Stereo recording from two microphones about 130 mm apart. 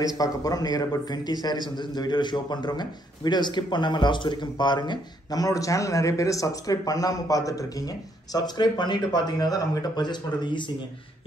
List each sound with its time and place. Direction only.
0.0 s a man's voice: 30° left (ahead or behind)